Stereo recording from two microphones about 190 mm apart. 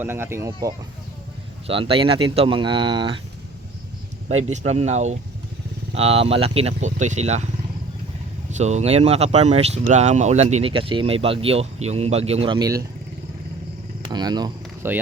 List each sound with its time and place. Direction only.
0.0 s speech: 10° right (ahead or behind)
1.6 s speech: 30° right (ahead or behind)
4.7 s speech: 35° right (ahead or behind)
8.4 s speech: 35° right (ahead or behind); by 12.8 s 20° right (ahead or behind)
14.0 s speech: 20° right (ahead or behind)